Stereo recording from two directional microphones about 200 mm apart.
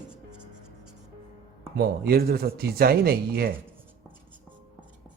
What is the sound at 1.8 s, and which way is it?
Speech, 50° right (ahead or behind).